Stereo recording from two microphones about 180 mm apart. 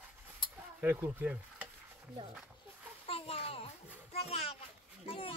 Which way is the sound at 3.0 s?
35° left (ahead or behind).